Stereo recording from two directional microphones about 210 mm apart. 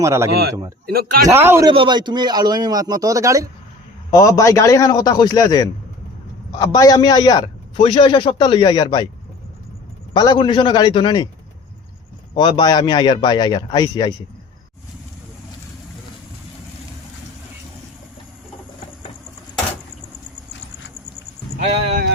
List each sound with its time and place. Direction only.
0.0 s speech: 15° right (ahead or behind)
0.9 s speech: 45° right (ahead or behind)
1.3 s speech: 10° right (ahead or behind)
1.7 s a man's voice: 25° right (ahead or behind)
4.1 s a man's voice: 15° left (ahead or behind)
10.2 s a man's voice: 20° left (ahead or behind)
12.3 s a man's voice: 20° left (ahead or behind)
21.6 s a man's voice: 30° right (ahead or behind)